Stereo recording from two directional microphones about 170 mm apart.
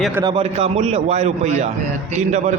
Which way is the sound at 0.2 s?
30° right (ahead or behind).